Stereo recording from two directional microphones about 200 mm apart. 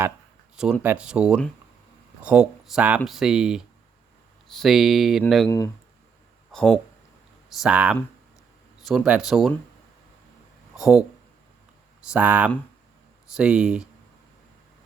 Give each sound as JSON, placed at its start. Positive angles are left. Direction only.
{"t": 0.5, "sound": "speech", "side_deg": -5}
{"t": 5.5, "sound": "speech", "side_deg": 15}
{"t": 6.5, "sound": "speech", "side_deg": 5}
{"t": 10.8, "sound": "speech", "side_deg": 0}
{"t": 12.1, "sound": "speech", "side_deg": -10}